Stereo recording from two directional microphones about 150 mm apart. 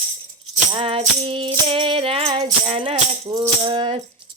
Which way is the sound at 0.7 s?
40° right (ahead or behind).